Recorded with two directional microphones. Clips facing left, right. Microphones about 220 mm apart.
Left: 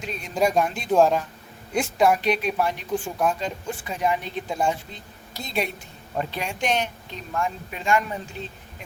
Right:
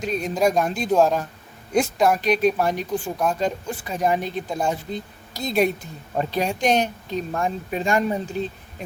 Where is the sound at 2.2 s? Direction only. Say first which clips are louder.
Right 4 dB; 40° right (ahead or behind).